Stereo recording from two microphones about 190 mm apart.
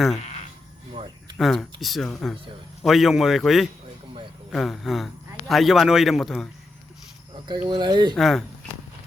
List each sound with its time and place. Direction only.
0.2 s sheep: 40° left (ahead or behind)
0.9 s a sound: 25° right (ahead or behind)
1.4 s speech: centre (ahead or behind)
7.4 s speech: 25° right (ahead or behind)
8.1 s speech: centre (ahead or behind)